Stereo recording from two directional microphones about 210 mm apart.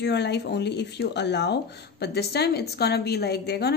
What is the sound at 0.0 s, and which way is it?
Speech, 55° left (ahead or behind).